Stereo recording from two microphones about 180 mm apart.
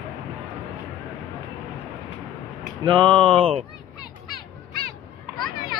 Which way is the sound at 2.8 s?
25° right (ahead or behind).